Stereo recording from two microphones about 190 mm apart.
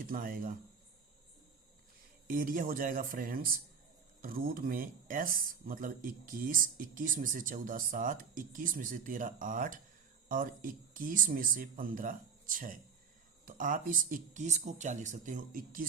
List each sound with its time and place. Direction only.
0.0 s speech: 45° right (ahead or behind)
2.2 s speech: 45° right (ahead or behind)